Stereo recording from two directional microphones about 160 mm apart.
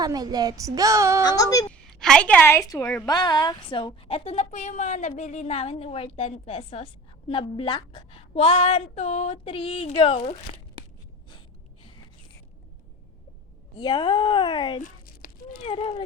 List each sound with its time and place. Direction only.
0.0 s speech: 25° right (ahead or behind)
1.2 s speech: 25° left (ahead or behind)
1.7 s a woman's voice: 5° left (ahead or behind)
3.1 s a woman's voice: 25° left (ahead or behind)
13.7 s a woman's voice: 30° left (ahead or behind)
15.0 s a sound: 65° left (ahead or behind)
15.6 s a woman's voice: 35° left (ahead or behind)